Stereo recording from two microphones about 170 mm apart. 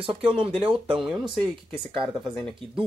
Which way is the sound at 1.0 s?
5° right (ahead or behind).